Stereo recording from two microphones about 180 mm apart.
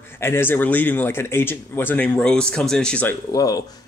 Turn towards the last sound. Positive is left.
turn(degrees=20)  # may be behind; listen again after turning